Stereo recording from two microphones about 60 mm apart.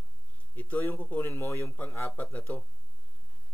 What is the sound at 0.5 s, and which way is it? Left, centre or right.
Speech, left.